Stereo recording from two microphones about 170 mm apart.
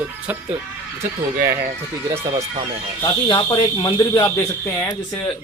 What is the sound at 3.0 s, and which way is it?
Speech, 25° left (ahead or behind).